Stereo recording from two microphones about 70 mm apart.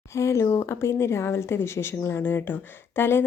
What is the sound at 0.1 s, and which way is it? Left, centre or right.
Speech, left.